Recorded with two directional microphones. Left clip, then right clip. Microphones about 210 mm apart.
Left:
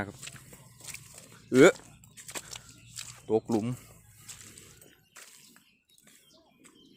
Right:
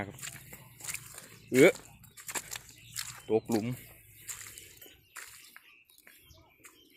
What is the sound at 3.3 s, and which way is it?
Speech, 20° left (ahead or behind).